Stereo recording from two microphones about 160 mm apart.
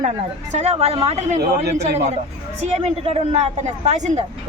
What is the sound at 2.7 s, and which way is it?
Speech, 40° right (ahead or behind).